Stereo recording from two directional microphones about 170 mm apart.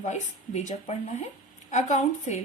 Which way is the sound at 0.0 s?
45° left (ahead or behind).